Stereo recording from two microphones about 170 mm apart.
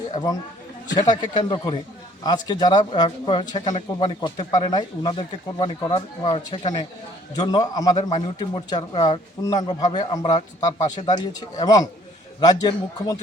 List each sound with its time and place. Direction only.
0.1 s speech: 25° left (ahead or behind)